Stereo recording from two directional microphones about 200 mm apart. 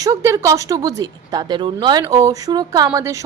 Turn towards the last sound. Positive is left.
turn(degrees=-15)  # may be behind; listen again after turning